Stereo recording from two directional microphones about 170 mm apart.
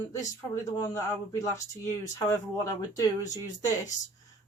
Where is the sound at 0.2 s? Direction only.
20° left (ahead or behind).